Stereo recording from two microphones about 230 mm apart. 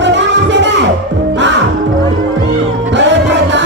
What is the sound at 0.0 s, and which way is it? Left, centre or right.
Music, right.